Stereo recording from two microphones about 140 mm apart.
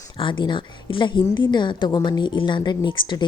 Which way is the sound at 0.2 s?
35° left (ahead or behind).